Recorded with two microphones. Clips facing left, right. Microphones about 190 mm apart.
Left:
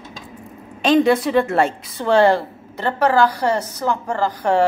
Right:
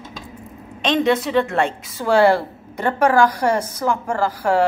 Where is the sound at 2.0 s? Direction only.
10° right (ahead or behind).